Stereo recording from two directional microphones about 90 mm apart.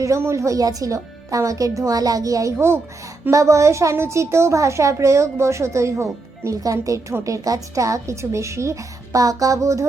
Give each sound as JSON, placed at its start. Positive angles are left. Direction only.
{"t": 0.0, "sound": "a woman's voice", "side_deg": -30}